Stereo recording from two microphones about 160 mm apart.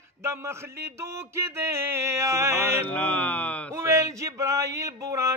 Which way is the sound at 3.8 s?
15° right (ahead or behind).